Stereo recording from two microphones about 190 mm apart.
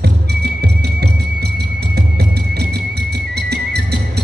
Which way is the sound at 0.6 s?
60° right (ahead or behind).